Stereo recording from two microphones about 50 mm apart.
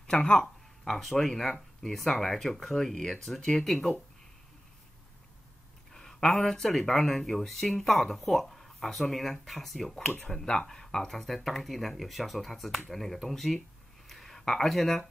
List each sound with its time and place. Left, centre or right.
0.0 s speech: centre
5.9 s speech: centre
14.0 s a sound: centre